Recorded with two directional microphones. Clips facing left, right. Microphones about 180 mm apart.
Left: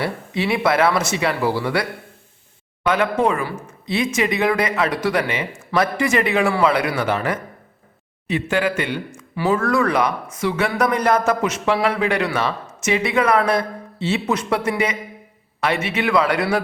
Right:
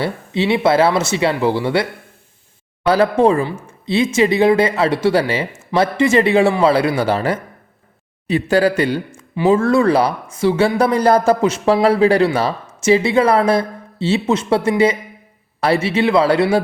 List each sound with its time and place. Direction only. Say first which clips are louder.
0.0 s a man's voice: right 4 dB; 25° right (ahead or behind)
9.3 s a man's voice: right 5 dB; 25° right (ahead or behind)